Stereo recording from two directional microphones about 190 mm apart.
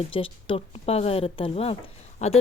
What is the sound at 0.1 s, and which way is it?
Speech, 30° left (ahead or behind).